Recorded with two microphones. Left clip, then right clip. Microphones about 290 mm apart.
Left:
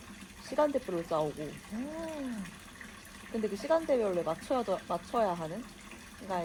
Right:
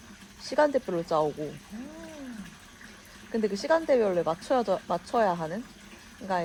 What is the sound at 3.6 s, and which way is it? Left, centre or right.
Speech, right.